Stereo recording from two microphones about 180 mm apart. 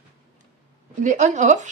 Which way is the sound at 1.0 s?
40° right (ahead or behind).